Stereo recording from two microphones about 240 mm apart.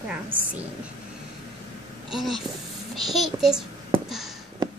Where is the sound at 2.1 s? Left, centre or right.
Centre.